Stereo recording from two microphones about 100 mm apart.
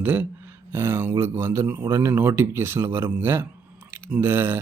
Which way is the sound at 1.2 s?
25° right (ahead or behind).